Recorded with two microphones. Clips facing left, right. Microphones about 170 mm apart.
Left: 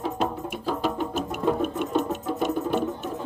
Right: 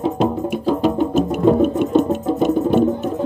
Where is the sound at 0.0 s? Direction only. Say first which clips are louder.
Right 9 dB; 25° right (ahead or behind).